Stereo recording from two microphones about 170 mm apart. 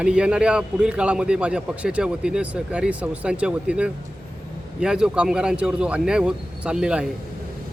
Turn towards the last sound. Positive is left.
turn(degrees=-5)  # may be behind; listen again after turning